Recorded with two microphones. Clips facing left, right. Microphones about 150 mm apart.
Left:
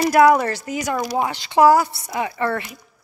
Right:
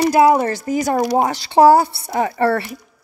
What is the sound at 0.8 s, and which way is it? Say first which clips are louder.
A woman's voice: right 5 dB; 40° right (ahead or behind).